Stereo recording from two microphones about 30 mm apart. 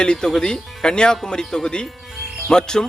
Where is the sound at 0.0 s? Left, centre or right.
Left.